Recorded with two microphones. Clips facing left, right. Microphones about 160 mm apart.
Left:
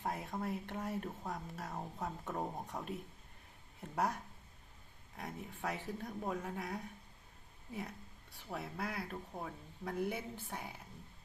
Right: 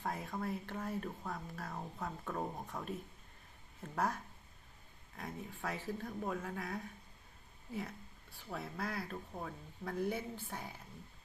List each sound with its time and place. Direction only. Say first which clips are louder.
0.0 s speech: even; 20° left (ahead or behind)
3.9 s speech: even; 15° left (ahead or behind)
8.4 s speech: even; 10° left (ahead or behind)